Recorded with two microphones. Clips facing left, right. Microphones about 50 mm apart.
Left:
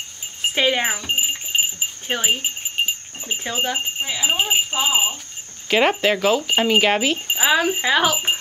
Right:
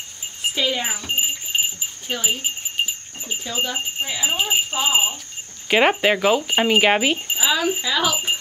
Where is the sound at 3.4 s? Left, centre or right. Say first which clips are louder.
Left 2 dB; left.